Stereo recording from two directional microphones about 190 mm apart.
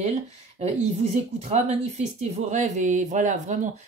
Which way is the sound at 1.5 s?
35° right (ahead or behind).